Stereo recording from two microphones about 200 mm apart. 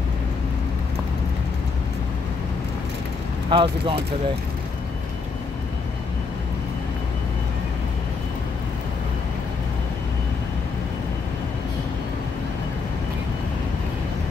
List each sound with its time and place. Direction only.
3.4 s speech: 25° right (ahead or behind)